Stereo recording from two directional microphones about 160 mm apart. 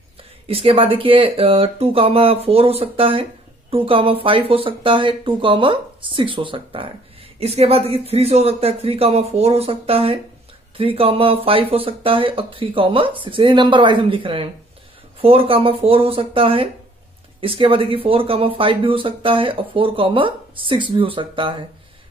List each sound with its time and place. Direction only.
0.5 s speech: 35° right (ahead or behind)